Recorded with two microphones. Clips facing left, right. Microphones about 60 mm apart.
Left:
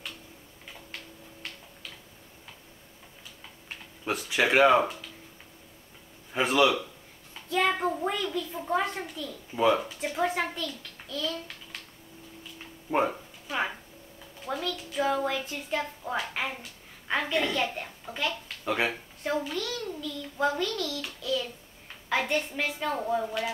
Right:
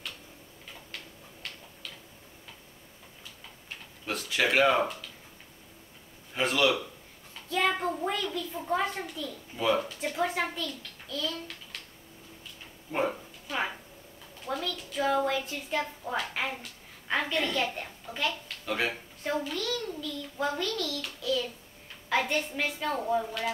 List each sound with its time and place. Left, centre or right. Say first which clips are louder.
1.4 s tick-tock: even; centre
4.1 s speech: left 3 dB; centre
6.3 s speech: left 3 dB; centre
7.4 s a child's voice: left 2 dB; centre
13.5 s a sound: left 2 dB; centre
14.4 s a child's voice: left 1 dB; centre
18.7 s speech: left 3 dB; centre
19.2 s a child's voice: left 1 dB; centre